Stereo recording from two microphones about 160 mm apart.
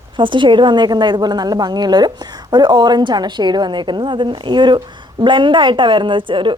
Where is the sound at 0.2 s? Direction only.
30° right (ahead or behind).